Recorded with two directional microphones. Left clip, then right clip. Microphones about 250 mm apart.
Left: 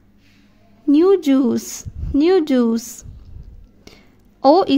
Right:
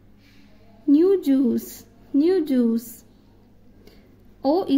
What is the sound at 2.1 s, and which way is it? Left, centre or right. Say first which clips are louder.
Speech: left 5 dB; left.